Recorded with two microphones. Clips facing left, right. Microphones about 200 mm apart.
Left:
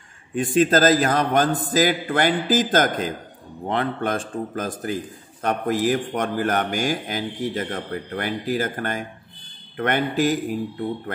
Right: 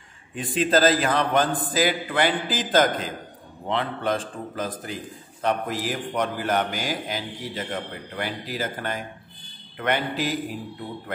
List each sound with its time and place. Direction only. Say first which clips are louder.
0.4 s a man's voice: left 3 dB; 45° left (ahead or behind)